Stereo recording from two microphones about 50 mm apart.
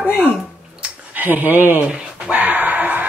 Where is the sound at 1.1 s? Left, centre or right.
Right.